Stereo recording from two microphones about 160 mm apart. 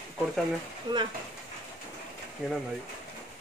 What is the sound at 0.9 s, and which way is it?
Speech, 25° right (ahead or behind).